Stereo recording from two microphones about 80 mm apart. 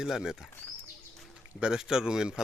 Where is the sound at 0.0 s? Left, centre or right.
Centre.